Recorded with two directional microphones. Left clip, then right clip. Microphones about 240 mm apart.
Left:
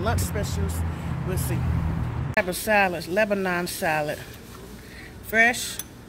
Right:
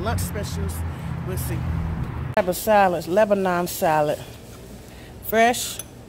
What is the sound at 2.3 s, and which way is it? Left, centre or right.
Speech, centre.